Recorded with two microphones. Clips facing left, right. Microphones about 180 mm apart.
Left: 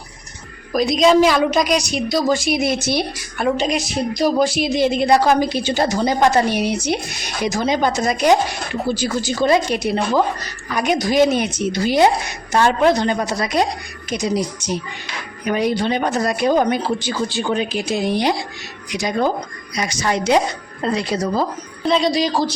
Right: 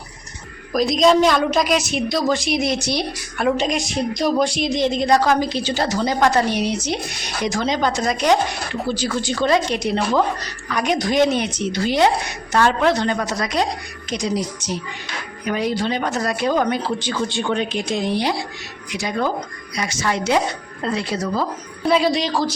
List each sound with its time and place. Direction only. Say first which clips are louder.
0.7 s a woman's voice: left 1 dB; centre (ahead or behind)
19.7 s speech: left 2 dB; 15° left (ahead or behind)
21.8 s a woman's voice: even; 5° right (ahead or behind)